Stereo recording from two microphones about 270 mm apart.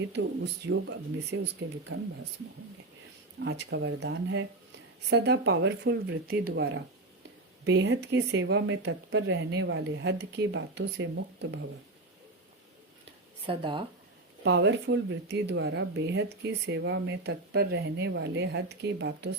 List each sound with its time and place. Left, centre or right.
0.1 s speech: right
3.4 s speech: right
13.5 s speech: centre
14.4 s speech: right